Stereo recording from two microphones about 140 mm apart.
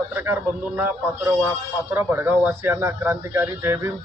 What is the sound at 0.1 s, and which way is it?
A man's voice, 15° right (ahead or behind).